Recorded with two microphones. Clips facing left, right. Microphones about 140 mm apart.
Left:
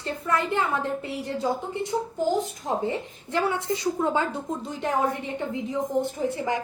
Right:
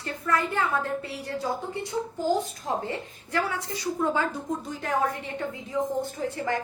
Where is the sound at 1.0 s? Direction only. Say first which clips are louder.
Left 3 dB; 20° left (ahead or behind).